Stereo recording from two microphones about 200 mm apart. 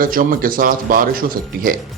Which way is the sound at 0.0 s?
45° right (ahead or behind).